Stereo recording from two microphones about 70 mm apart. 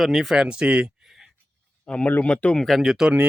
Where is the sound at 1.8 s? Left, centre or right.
Centre.